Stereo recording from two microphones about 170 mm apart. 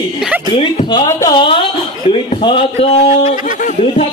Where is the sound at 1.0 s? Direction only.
20° left (ahead or behind).